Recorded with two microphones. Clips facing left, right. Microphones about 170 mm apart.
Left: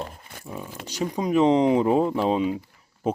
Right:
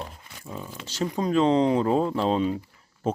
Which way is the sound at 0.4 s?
10° left (ahead or behind).